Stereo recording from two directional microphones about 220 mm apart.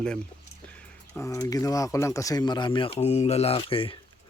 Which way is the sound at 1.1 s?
10° left (ahead or behind).